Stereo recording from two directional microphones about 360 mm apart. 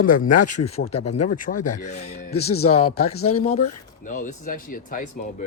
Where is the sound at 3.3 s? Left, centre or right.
Centre.